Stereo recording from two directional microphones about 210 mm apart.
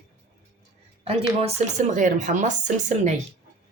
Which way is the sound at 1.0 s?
30° right (ahead or behind).